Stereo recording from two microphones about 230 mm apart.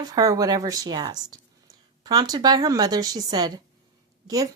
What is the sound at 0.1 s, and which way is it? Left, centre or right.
Speech, centre.